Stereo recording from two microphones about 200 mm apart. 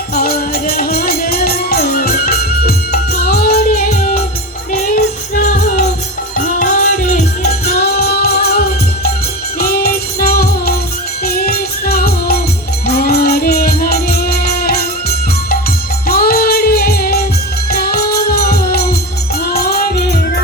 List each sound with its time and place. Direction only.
0.1 s music: 50° left (ahead or behind)
7.6 s music: 50° left (ahead or behind)
16.0 s music: 50° left (ahead or behind)